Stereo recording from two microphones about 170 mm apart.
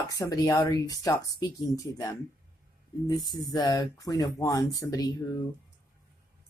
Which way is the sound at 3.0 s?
20° left (ahead or behind).